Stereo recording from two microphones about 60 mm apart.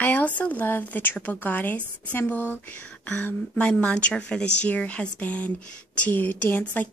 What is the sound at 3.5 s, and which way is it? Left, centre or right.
A woman's voice, centre.